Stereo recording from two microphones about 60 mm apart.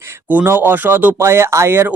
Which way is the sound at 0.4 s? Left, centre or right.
Right.